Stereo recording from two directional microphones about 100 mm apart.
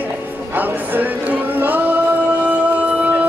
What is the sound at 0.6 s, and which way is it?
Music, 15° right (ahead or behind).